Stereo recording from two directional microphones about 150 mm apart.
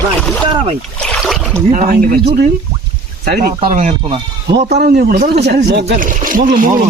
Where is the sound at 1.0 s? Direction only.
Centre (ahead or behind).